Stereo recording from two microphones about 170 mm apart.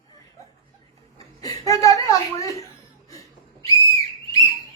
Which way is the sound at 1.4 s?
20° left (ahead or behind).